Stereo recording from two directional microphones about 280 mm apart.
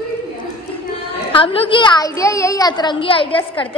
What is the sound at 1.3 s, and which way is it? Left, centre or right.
A woman's voice, centre.